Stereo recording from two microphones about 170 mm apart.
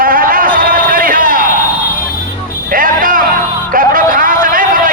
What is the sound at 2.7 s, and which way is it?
Music, 55° right (ahead or behind).